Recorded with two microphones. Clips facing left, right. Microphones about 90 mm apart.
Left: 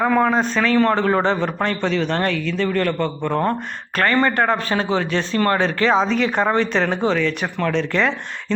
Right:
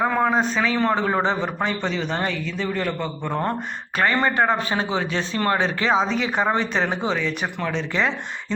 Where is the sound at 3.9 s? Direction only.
15° right (ahead or behind).